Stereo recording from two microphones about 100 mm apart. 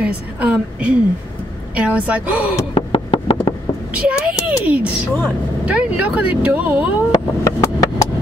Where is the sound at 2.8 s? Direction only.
65° left (ahead or behind).